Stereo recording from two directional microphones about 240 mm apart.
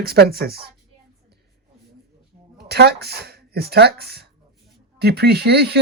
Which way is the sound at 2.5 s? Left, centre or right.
Right.